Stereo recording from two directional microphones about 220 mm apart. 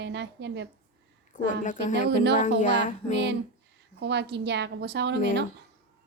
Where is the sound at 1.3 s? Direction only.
35° left (ahead or behind).